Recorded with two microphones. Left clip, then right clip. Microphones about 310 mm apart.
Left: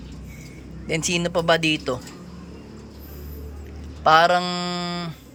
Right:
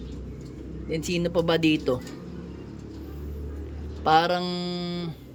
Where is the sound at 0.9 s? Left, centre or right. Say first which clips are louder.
Left 4 dB; centre.